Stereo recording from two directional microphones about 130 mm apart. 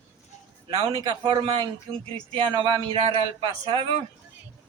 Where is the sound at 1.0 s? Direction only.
35° right (ahead or behind).